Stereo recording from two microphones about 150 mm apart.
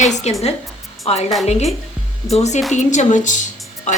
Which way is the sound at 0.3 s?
45° left (ahead or behind).